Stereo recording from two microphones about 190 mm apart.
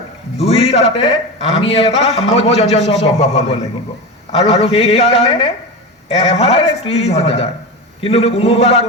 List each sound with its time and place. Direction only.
0.3 s a man's voice: 35° left (ahead or behind)